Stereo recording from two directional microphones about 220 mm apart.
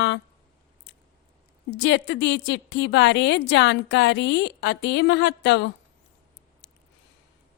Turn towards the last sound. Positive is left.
turn(degrees=55)  # may be behind; listen again after turning